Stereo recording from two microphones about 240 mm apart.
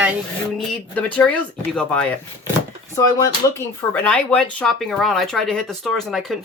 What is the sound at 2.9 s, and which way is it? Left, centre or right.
Speech, centre.